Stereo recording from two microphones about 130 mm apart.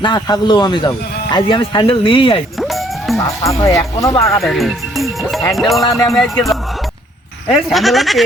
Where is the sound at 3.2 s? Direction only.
25° left (ahead or behind).